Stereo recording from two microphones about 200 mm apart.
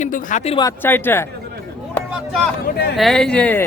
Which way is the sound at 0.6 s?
10° left (ahead or behind).